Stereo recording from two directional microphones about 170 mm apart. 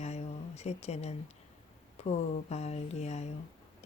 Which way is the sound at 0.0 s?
40° left (ahead or behind).